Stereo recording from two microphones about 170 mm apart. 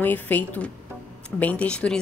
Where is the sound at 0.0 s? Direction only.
10° left (ahead or behind).